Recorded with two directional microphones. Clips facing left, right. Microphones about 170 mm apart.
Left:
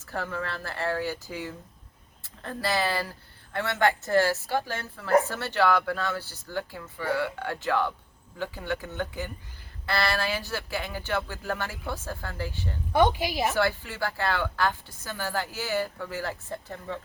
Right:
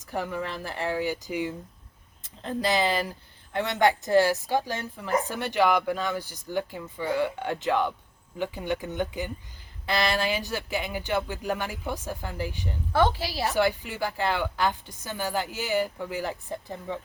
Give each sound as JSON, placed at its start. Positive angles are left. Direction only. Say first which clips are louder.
{"t": 0.0, "sound": "a woman's voice", "louder": "right 2 dB", "side_deg": -15}
{"t": 12.9, "sound": "a woman's voice", "louder": "left 1 dB", "side_deg": 15}
{"t": 13.5, "sound": "a woman's voice", "louder": "right 2 dB", "side_deg": -15}